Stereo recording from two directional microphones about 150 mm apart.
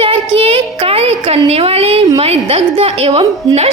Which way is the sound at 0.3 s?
40° right (ahead or behind).